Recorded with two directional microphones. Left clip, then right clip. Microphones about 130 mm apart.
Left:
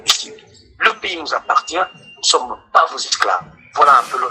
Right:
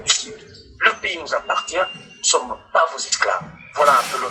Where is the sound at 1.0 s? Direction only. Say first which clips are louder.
Left 2 dB; 50° left (ahead or behind).